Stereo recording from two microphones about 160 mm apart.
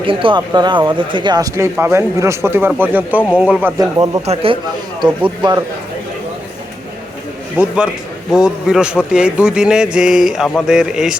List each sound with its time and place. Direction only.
0.0 s speech: 35° right (ahead or behind); by 3.7 s 10° right (ahead or behind)
3.8 s speech: 25° right (ahead or behind)
4.4 s speech: 35° right (ahead or behind)
7.5 s speech: 10° right (ahead or behind)